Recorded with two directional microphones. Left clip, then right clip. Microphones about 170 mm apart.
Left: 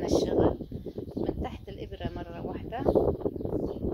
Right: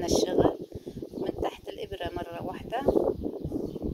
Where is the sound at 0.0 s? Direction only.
35° right (ahead or behind).